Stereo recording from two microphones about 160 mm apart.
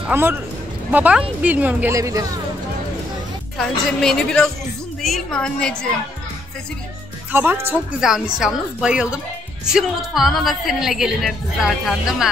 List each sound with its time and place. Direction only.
0.0 s a man's voice: 15° right (ahead or behind)
3.5 s a woman's voice: 5° left (ahead or behind)
7.3 s a woman's voice: 15° right (ahead or behind)